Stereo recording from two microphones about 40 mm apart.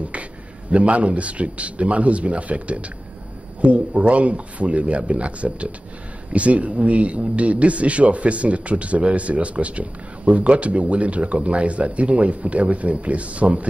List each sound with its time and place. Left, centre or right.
0.1 s a man's voice: right